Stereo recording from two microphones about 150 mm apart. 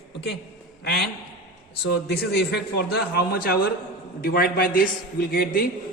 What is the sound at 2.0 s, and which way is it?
A man's voice, 90° left.